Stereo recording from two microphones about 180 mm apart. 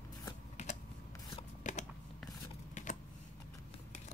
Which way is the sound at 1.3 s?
40° left (ahead or behind).